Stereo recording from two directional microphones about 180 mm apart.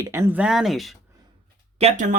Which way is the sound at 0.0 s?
15° right (ahead or behind).